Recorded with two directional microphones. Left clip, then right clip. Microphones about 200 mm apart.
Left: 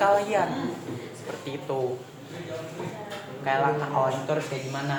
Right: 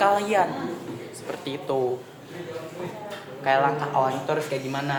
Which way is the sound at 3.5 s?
50° right (ahead or behind).